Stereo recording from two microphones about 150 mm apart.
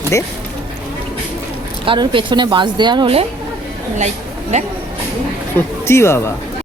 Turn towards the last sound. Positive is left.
turn(degrees=15)  # may be behind; listen again after turning